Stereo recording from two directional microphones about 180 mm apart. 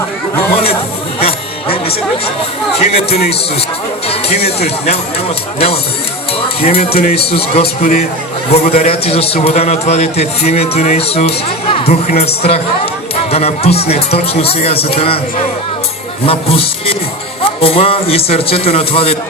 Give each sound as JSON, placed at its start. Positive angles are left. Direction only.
{"t": 1.2, "sound": "music", "side_deg": 30}
{"t": 2.7, "sound": "a man's voice", "side_deg": 35}
{"t": 4.4, "sound": "a man's voice", "side_deg": 35}
{"t": 7.8, "sound": "speech", "side_deg": 45}
{"t": 8.7, "sound": "a man's voice", "side_deg": 35}